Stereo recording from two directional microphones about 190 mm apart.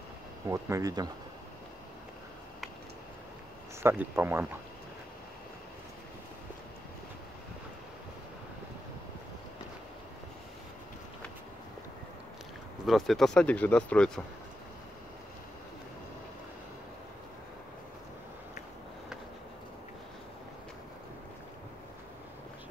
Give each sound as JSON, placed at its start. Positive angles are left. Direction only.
{"t": 0.5, "sound": "speech", "side_deg": -15}
{"t": 3.8, "sound": "speech", "side_deg": -15}
{"t": 12.8, "sound": "speech", "side_deg": 0}